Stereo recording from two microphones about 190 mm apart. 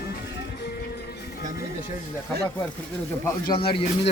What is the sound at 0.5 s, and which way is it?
Music, 60° left (ahead or behind).